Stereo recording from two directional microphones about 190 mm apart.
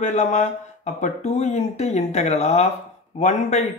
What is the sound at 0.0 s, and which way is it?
A man's voice, 35° left (ahead or behind).